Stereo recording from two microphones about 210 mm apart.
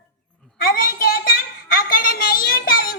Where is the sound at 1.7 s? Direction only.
45° left (ahead or behind).